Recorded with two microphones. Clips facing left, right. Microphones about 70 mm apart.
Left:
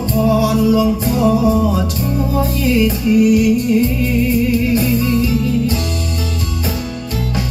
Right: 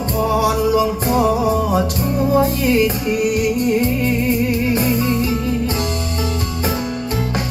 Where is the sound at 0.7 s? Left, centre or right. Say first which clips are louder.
Left 2 dB; right.